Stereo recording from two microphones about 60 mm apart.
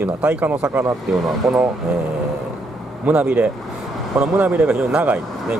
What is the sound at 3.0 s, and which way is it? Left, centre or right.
Speech, right.